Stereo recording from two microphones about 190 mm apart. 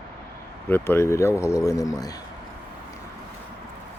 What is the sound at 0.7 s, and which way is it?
A man's voice, 10° left (ahead or behind).